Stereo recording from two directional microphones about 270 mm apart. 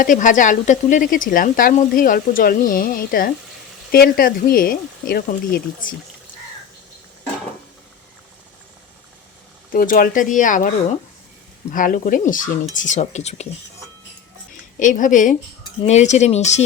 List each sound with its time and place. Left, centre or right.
0.0 s speech: left
9.7 s speech: left
11.7 s speech: left
14.8 s speech: left